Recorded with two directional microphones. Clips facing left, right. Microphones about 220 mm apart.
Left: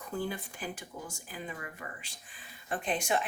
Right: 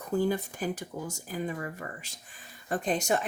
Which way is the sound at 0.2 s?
40° right (ahead or behind).